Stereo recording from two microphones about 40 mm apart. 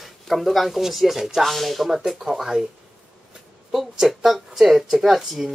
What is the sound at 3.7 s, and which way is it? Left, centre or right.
Speech, centre.